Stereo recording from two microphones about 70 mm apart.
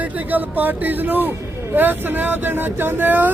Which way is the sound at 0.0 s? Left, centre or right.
Right.